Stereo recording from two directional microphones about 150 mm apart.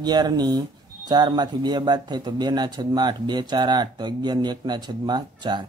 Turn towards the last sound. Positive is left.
turn(degrees=-30)  # may be behind; listen again after turning